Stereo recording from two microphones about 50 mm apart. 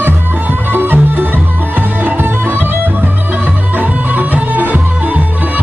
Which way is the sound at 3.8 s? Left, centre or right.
Right.